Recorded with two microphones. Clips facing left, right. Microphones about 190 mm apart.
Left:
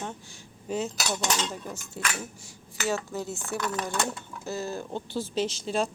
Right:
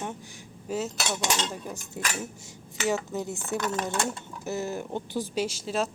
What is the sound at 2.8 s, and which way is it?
Cutlery, 10° right (ahead or behind).